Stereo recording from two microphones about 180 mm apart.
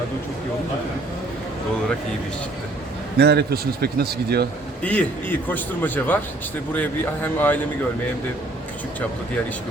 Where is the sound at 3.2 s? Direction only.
65° right (ahead or behind).